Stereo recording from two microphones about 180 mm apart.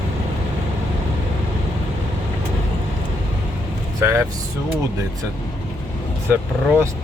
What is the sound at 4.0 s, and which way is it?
Vehicle, 15° right (ahead or behind).